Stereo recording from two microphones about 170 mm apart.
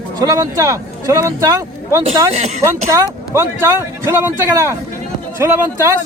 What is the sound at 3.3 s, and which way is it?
A man's voice, 15° right (ahead or behind).